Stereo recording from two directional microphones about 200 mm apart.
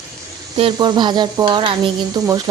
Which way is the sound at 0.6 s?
25° right (ahead or behind).